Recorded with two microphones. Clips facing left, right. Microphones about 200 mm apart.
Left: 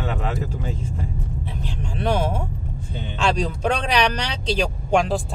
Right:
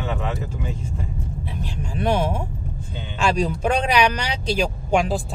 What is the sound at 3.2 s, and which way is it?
Speech, 10° right (ahead or behind).